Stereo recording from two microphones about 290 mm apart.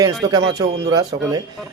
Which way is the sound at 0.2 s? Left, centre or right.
Centre.